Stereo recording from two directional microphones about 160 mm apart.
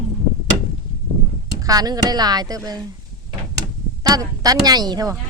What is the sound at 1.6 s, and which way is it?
Speech, 25° right (ahead or behind).